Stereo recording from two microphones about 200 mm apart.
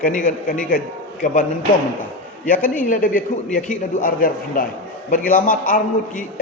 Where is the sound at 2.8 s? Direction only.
45° left (ahead or behind).